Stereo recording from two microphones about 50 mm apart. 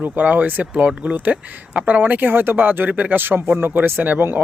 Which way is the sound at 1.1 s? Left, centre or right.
Right.